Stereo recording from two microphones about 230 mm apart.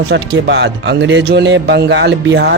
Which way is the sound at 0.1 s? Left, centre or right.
Right.